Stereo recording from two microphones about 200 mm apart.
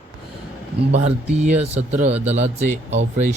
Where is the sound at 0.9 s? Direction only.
35° right (ahead or behind).